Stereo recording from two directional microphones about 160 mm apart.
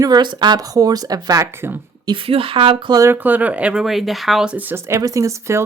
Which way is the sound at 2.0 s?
35° right (ahead or behind).